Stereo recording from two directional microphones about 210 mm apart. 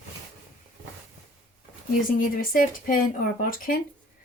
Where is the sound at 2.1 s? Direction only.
40° left (ahead or behind).